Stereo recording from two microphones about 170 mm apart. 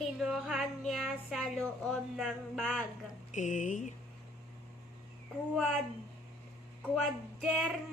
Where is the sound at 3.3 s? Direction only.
45° left (ahead or behind).